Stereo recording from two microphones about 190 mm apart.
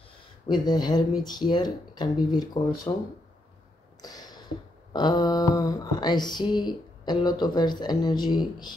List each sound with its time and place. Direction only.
0.5 s speech: 20° left (ahead or behind)
4.0 s a sound: 20° left (ahead or behind)
4.9 s speech: 20° left (ahead or behind)